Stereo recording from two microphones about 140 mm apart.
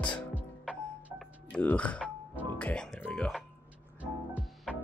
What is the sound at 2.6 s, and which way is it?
Speech, 10° left (ahead or behind).